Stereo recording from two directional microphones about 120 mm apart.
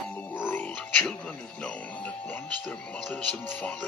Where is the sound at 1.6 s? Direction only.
10° left (ahead or behind).